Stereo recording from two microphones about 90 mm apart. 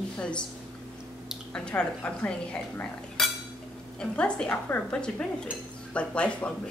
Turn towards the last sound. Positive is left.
turn(degrees=10)  # may be behind; listen again after turning